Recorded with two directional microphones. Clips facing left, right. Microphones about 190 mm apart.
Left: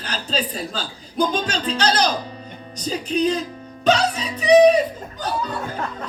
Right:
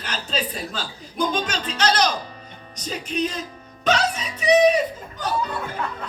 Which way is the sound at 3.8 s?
35° left (ahead or behind).